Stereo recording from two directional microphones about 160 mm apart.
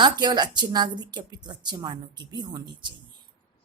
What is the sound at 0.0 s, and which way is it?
A woman's voice, 25° right (ahead or behind).